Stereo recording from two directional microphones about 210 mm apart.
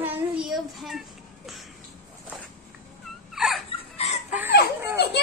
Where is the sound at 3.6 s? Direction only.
25° left (ahead or behind).